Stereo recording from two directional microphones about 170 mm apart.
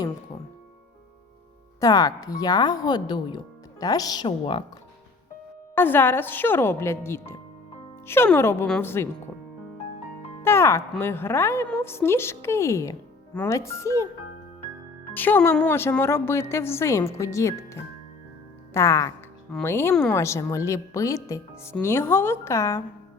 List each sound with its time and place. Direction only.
1.8 s speech: 20° left (ahead or behind)
5.7 s a woman's voice: 10° left (ahead or behind)
10.4 s a woman's voice: 15° left (ahead or behind)
15.1 s a woman's voice: 10° left (ahead or behind)